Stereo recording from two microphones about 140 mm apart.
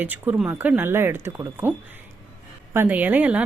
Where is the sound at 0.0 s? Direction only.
10° right (ahead or behind).